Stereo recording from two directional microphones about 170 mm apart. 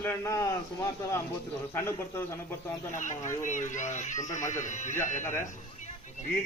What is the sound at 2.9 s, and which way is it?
Speech, 45° left (ahead or behind).